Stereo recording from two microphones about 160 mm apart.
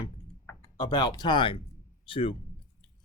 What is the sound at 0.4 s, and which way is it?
Speech, 25° left (ahead or behind).